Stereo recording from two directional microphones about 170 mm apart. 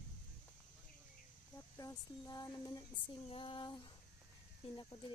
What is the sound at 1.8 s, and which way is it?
Speech, 20° left (ahead or behind).